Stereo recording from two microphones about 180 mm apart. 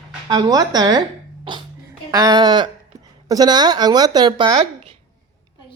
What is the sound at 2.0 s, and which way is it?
Speech, 20° right (ahead or behind).